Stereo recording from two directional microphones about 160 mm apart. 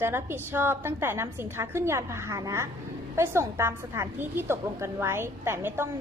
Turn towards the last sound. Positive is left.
turn(degrees=-15)  # may be behind; listen again after turning